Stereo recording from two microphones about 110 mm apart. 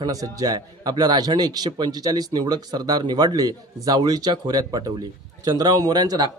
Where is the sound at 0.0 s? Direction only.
35° right (ahead or behind).